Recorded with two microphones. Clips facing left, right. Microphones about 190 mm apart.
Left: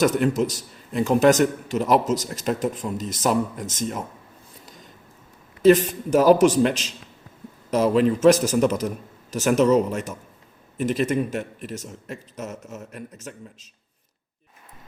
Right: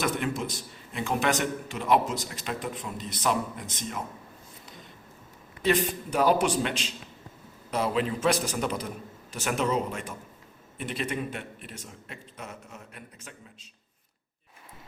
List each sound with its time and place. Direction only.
0.0 s a man's voice: 40° left (ahead or behind)
5.6 s a man's voice: 45° left (ahead or behind)